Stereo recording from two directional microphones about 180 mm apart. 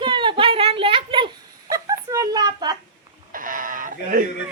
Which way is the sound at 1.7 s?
20° right (ahead or behind).